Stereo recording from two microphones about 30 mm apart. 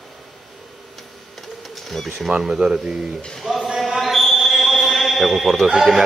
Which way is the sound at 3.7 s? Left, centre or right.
Centre.